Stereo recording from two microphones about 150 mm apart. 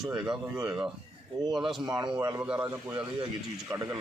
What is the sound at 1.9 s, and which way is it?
A man's voice, 25° right (ahead or behind).